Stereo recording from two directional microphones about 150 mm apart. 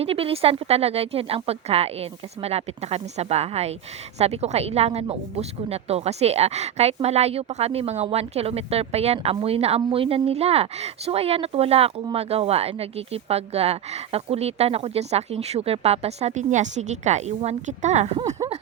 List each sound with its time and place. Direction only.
0.0 s speech: 40° right (ahead or behind)